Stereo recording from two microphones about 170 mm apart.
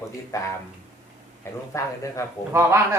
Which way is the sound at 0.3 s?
20° left (ahead or behind).